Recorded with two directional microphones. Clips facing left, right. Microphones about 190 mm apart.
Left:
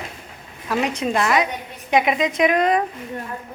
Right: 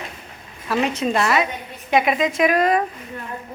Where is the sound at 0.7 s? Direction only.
15° left (ahead or behind).